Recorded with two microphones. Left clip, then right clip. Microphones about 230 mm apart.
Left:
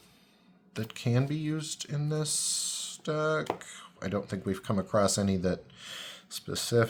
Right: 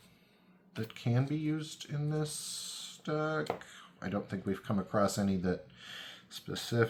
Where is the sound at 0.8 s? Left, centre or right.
Left.